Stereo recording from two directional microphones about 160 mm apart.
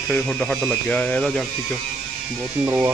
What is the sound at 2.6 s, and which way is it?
Speech, 15° right (ahead or behind).